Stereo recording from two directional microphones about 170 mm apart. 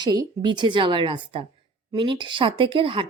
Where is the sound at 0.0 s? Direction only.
25° right (ahead or behind).